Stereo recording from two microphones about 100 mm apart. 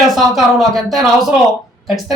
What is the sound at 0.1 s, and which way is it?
A man's voice, centre (ahead or behind).